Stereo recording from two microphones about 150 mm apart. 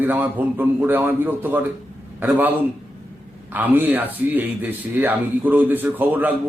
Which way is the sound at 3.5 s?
10° right (ahead or behind).